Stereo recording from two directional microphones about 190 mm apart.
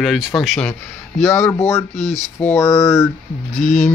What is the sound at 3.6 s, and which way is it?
Music, 40° left (ahead or behind).